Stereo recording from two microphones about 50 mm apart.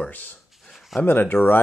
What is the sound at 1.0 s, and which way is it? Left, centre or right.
Speech, left.